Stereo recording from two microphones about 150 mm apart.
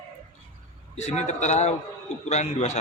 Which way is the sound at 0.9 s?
50° left (ahead or behind).